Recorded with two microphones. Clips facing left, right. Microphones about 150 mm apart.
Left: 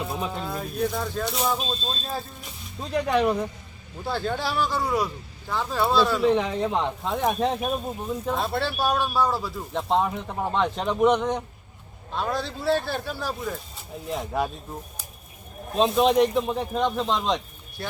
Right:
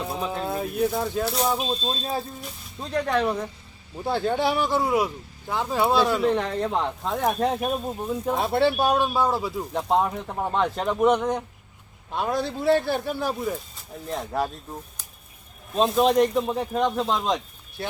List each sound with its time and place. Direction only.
0.0 s pigeon: centre (ahead or behind)
0.5 s speech: 10° right (ahead or behind)
1.5 s speech: 15° right (ahead or behind)
2.8 s speech: 5° left (ahead or behind)
4.0 s speech: 15° right (ahead or behind)
6.2 s speech: 5° left (ahead or behind); by 9.6 s 20° right (ahead or behind)
9.7 s speech: 5° right (ahead or behind)
12.1 s speech: 15° right (ahead or behind)
14.1 s speech: centre (ahead or behind)
15.7 s speech: centre (ahead or behind)